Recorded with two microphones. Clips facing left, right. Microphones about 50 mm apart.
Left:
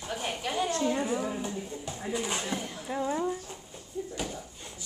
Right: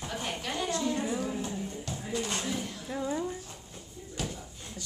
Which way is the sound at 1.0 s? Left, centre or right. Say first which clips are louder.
Left 2 dB; centre.